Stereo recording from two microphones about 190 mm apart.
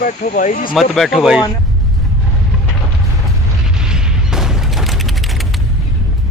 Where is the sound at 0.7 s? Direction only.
Centre (ahead or behind).